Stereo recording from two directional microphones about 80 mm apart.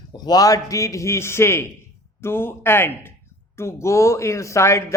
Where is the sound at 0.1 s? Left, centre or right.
Left.